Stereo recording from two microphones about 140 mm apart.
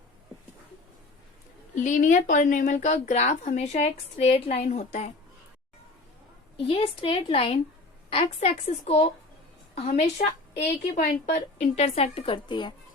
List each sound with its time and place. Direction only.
1.7 s speech: 60° left (ahead or behind)
6.7 s a woman's voice: 40° left (ahead or behind)
10.9 s a woman's voice: 60° left (ahead or behind); by 12.7 s 35° left (ahead or behind)